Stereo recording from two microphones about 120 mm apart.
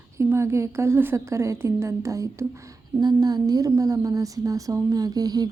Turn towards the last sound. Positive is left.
turn(degrees=-30)  # may be behind; listen again after turning